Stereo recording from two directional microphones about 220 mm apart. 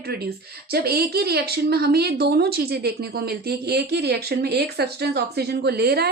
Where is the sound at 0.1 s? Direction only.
45° right (ahead or behind).